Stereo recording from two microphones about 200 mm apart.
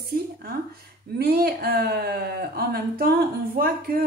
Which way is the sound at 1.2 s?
50° right (ahead or behind).